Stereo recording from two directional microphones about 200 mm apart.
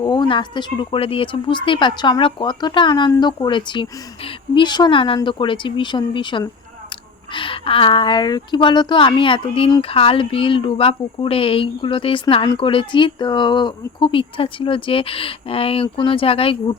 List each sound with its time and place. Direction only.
0.0 s a woman's voice: 20° left (ahead or behind)